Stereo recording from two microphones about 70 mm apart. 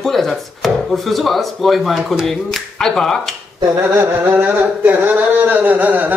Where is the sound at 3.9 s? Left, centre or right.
Right.